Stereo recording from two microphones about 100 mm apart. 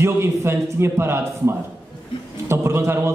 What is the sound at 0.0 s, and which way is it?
A man's voice, 25° right (ahead or behind).